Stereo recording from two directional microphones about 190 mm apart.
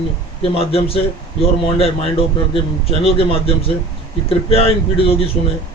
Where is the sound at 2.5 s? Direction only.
30° left (ahead or behind).